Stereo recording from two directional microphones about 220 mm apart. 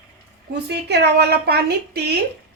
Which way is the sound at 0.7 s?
50° right (ahead or behind).